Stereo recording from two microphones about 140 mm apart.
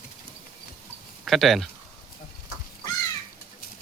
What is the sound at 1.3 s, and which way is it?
Speech, centre (ahead or behind).